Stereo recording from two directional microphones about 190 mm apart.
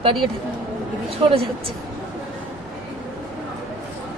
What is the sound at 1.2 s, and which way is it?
Speech, 30° right (ahead or behind).